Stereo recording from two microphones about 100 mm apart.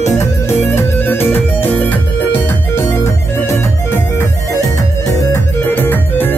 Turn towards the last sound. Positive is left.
turn(degrees=20)  # may be behind; listen again after turning